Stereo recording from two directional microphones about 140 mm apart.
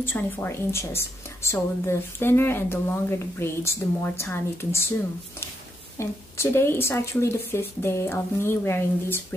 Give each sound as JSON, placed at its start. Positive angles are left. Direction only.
{"t": 0.0, "sound": "a woman's voice", "side_deg": 15}
{"t": 5.9, "sound": "a woman's voice", "side_deg": 20}